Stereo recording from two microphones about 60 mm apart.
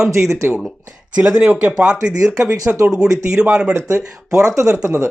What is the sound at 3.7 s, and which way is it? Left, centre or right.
Speech, right.